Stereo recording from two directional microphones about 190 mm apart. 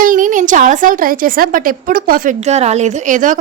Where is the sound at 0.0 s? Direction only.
45° right (ahead or behind).